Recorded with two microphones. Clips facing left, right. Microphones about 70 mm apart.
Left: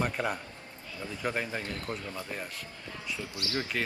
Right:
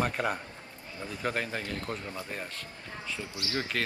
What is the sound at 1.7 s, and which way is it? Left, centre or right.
Speech, right.